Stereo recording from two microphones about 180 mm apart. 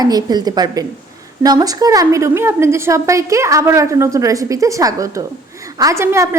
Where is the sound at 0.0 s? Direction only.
20° right (ahead or behind).